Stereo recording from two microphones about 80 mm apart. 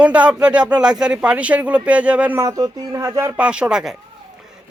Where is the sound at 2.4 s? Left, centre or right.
Right.